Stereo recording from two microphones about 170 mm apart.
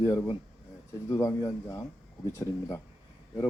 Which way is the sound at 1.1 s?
20° left (ahead or behind).